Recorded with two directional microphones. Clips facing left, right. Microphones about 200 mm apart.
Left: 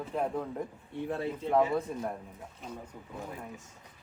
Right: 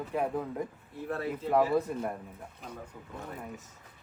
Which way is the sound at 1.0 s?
25° left (ahead or behind).